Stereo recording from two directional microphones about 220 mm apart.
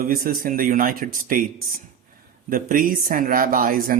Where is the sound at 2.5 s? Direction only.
40° right (ahead or behind).